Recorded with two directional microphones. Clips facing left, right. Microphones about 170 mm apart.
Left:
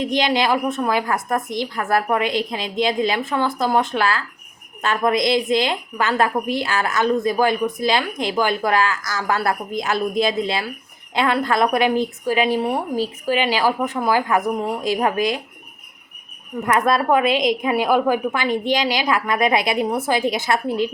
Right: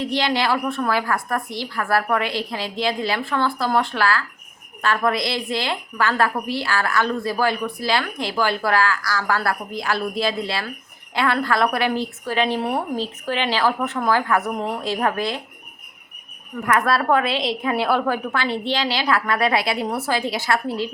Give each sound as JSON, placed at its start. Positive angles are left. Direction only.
{"t": 0.0, "sound": "a woman's voice", "side_deg": 15}
{"t": 16.6, "sound": "a woman's voice", "side_deg": 20}